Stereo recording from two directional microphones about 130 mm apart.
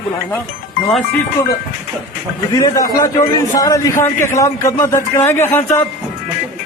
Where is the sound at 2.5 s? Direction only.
25° left (ahead or behind).